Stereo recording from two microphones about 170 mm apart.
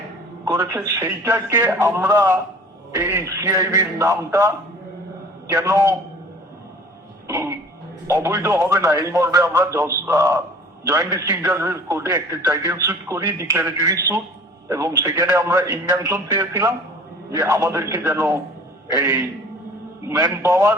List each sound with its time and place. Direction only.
0.4 s a man's voice: 10° right (ahead or behind)
2.1 s a man's voice: 20° right (ahead or behind)
7.3 s a sound: 15° right (ahead or behind)
8.0 s a man's voice: 15° right (ahead or behind)
20.1 s a man's voice: 20° right (ahead or behind)